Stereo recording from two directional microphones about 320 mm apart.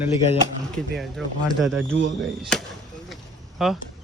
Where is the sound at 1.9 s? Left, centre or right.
Right.